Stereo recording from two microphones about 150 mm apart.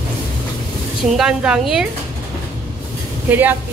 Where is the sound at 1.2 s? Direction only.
5° right (ahead or behind).